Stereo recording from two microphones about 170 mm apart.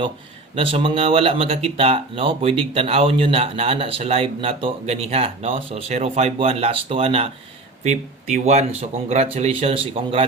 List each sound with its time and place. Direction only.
0.5 s speech: 30° right (ahead or behind)